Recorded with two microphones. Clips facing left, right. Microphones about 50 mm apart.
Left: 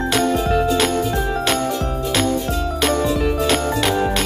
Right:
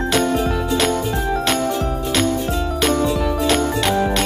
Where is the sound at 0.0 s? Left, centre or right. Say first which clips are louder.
Even; centre.